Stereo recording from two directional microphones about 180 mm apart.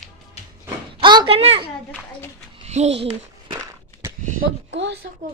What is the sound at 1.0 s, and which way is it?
Speech, 25° right (ahead or behind).